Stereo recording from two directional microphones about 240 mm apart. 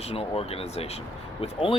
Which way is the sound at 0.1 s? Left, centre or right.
Left.